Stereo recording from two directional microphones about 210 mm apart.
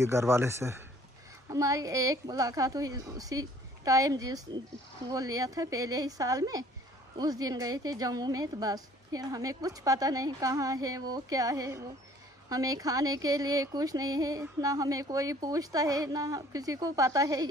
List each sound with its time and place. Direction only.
0.0 s speech: 15° right (ahead or behind)